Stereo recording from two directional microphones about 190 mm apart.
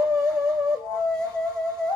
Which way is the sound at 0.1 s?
5° left (ahead or behind).